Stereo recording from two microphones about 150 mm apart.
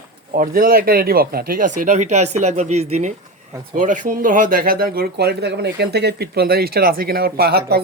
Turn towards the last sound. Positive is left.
turn(degrees=-90)